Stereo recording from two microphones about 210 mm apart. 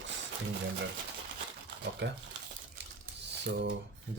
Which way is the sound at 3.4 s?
55° right (ahead or behind).